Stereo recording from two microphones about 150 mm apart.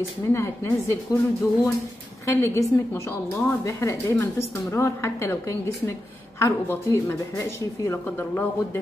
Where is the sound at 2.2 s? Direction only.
20° left (ahead or behind).